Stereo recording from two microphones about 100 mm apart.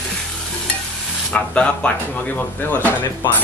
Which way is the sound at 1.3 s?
10° left (ahead or behind).